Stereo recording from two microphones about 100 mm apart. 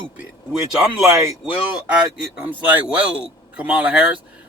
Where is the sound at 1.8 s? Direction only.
15° right (ahead or behind).